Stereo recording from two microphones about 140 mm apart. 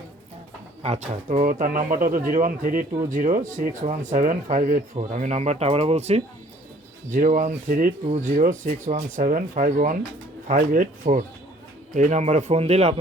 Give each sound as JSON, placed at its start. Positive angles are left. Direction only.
{"t": 0.8, "sound": "speech", "side_deg": -50}
{"t": 4.9, "sound": "speech", "side_deg": -55}
{"t": 7.1, "sound": "speech", "side_deg": -70}
{"t": 8.2, "sound": "speech", "side_deg": -70}
{"t": 10.5, "sound": "speech", "side_deg": -80}
{"t": 11.9, "sound": "speech", "side_deg": -60}